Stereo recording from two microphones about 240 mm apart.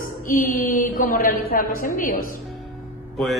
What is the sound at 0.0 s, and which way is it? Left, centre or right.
Mantra, left.